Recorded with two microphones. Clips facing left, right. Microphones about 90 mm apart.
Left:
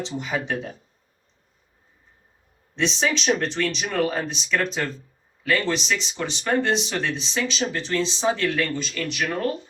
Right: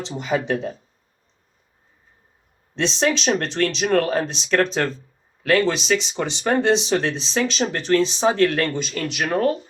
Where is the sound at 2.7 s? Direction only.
85° right; by 9.2 s 60° right (ahead or behind).